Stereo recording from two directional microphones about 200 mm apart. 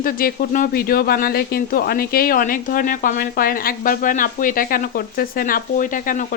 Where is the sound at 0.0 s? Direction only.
45° left (ahead or behind).